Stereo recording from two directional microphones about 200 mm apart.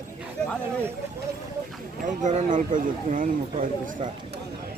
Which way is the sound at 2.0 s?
40° right (ahead or behind).